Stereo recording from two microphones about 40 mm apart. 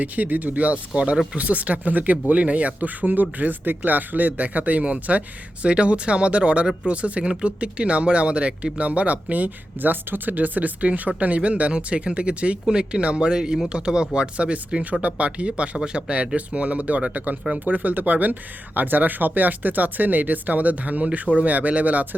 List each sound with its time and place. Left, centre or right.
0.0 s speech: right
1.1 s speech: centre
1.4 s speech: right
5.1 s speech: right